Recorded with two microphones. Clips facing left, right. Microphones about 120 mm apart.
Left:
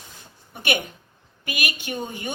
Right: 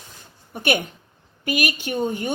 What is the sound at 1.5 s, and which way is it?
Speech, 40° right (ahead or behind).